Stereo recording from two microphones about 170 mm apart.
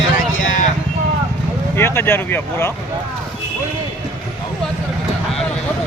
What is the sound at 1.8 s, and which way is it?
Speech, 15° left (ahead or behind).